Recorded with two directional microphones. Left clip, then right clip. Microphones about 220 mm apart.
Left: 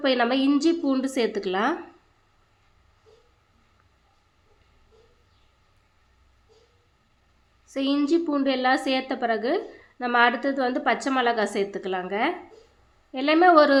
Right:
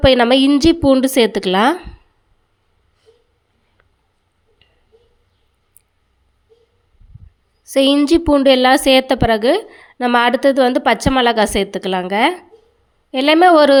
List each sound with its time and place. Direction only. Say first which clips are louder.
0.0 s a woman's voice: right 11 dB; 45° right (ahead or behind)
7.7 s a woman's voice: right 11 dB; 45° right (ahead or behind)